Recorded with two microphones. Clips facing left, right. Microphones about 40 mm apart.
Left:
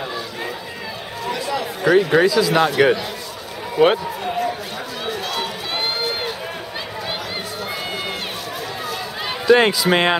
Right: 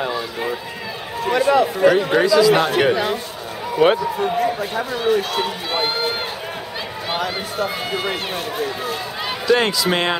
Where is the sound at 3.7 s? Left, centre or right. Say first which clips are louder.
Even; centre.